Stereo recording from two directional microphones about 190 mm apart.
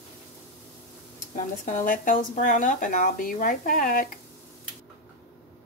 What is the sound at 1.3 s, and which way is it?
Speech, 45° left (ahead or behind).